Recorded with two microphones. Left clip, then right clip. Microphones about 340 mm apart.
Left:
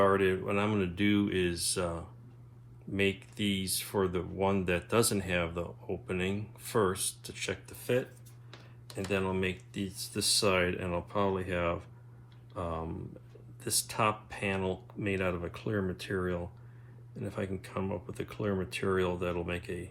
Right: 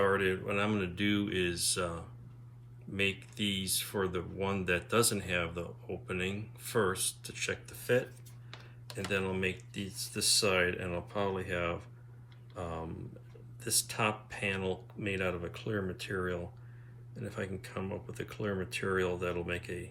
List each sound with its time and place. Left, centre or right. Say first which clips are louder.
0.0 s speech: left 3 dB; centre
9.0 s speech: left 1 dB; centre